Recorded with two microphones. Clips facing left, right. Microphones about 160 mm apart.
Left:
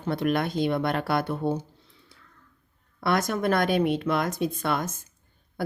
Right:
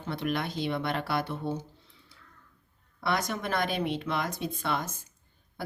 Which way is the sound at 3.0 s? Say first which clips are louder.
Left 6 dB; 55° left (ahead or behind).